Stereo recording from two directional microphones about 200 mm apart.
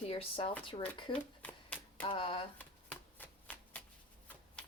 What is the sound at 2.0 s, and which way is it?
Speech, 25° left (ahead or behind).